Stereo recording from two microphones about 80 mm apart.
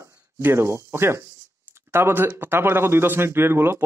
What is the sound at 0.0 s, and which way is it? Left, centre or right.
Speech, right.